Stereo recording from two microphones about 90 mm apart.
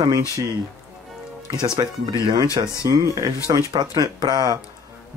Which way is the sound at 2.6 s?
70° right (ahead or behind).